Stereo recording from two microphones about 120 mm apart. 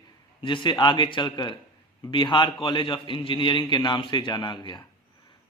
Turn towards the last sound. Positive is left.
turn(degrees=40)  # may be behind; listen again after turning